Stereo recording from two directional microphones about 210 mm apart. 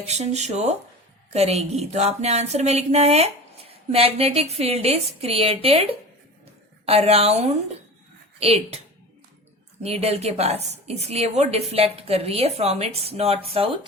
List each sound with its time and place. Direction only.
0.0 s a woman's voice: 30° right (ahead or behind)
9.8 s a woman's voice: 30° right (ahead or behind)